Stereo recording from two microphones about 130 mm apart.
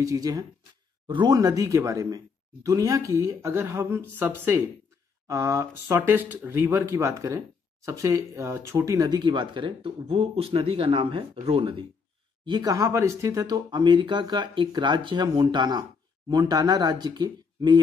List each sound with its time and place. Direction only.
0.0 s speech: 30° right (ahead or behind); by 11.8 s 45° right (ahead or behind)
12.4 s speech: 30° right (ahead or behind)